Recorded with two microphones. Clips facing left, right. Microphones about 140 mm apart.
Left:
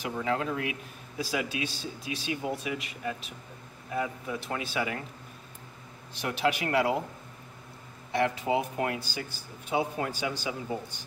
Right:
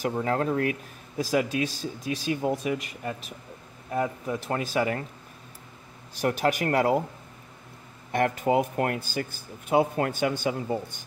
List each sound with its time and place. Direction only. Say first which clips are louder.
0.0 s speech: right 4 dB; 45° right (ahead or behind)
6.2 s speech: right 4 dB; 45° right (ahead or behind)
8.1 s speech: right 3 dB; 50° right (ahead or behind)